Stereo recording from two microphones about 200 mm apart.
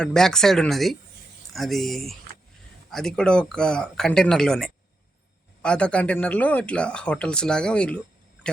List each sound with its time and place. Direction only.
0.0 s speech: 5° left (ahead or behind)